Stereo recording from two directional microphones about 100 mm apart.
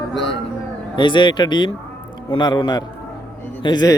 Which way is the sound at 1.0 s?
55° left (ahead or behind).